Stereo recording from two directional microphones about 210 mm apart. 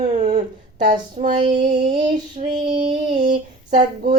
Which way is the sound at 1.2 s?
25° right (ahead or behind).